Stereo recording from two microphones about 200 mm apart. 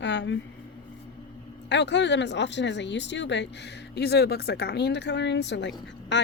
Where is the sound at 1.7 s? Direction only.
65° left (ahead or behind).